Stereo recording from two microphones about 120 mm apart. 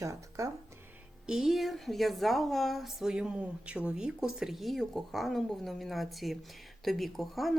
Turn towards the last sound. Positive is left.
turn(degrees=0)  # may be behind; listen again after turning